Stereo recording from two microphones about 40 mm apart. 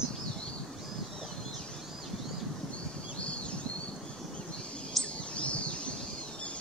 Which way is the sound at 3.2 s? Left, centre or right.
Left.